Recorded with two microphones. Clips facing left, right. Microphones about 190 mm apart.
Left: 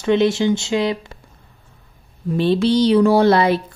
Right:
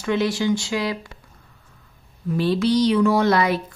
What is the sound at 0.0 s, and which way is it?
A woman's voice, 25° left (ahead or behind).